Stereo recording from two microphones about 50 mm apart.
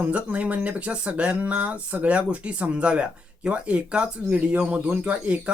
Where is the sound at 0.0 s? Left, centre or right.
Right.